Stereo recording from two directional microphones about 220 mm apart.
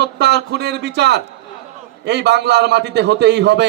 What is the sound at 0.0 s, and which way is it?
A man's voice, 50° right (ahead or behind).